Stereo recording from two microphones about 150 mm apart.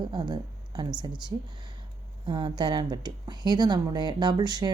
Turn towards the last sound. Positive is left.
turn(degrees=-25)  # may be behind; listen again after turning